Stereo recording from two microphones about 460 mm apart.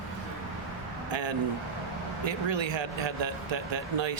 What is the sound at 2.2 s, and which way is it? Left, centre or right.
Speech, right.